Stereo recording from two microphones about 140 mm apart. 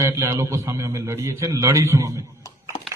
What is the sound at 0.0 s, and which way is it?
A man's voice, 20° right (ahead or behind).